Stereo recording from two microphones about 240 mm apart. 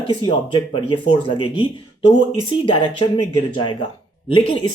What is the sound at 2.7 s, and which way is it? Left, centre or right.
Speech, left.